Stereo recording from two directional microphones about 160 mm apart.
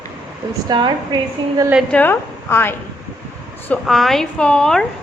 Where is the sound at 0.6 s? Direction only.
30° right (ahead or behind).